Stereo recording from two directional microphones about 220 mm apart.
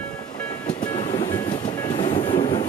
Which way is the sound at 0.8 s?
20° left (ahead or behind).